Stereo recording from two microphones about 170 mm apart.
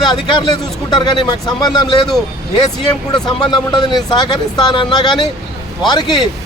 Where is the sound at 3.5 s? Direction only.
25° left (ahead or behind).